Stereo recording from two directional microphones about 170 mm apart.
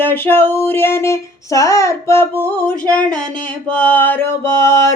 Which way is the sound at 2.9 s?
5° left (ahead or behind).